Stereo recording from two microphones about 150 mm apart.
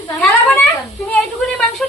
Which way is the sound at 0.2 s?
5° left (ahead or behind).